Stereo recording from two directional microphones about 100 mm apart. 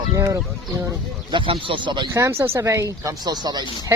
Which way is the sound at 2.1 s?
30° right (ahead or behind).